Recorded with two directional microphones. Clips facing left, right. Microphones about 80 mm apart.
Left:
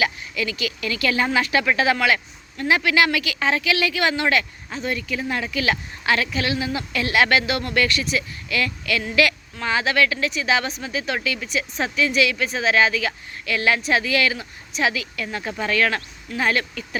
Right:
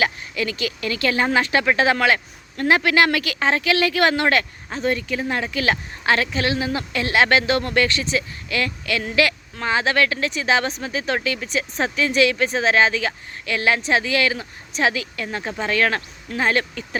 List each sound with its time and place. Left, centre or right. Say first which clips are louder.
0.0 s speech: right 1 dB; right